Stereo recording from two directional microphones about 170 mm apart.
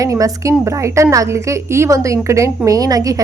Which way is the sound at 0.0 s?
20° right (ahead or behind).